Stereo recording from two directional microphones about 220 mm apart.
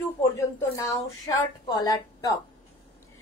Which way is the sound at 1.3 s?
15° left (ahead or behind).